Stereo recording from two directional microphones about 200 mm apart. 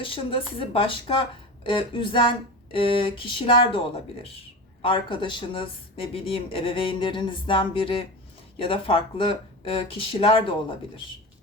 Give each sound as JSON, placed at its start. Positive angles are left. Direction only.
{"t": 0.0, "sound": "speech", "side_deg": 25}
{"t": 4.8, "sound": "speech", "side_deg": 25}